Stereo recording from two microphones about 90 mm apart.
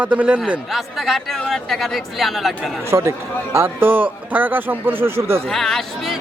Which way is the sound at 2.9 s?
30° right (ahead or behind).